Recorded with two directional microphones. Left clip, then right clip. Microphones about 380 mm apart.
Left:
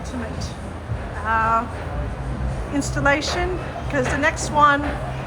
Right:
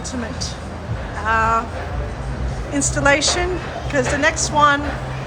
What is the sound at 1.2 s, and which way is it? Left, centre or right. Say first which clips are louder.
Speech: right 2 dB; centre.